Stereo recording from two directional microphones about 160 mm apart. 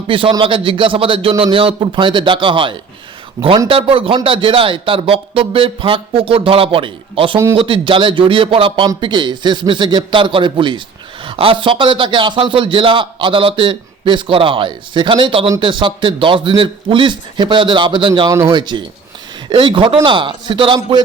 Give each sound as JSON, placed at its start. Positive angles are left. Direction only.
{"t": 0.1, "sound": "a man's voice", "side_deg": -35}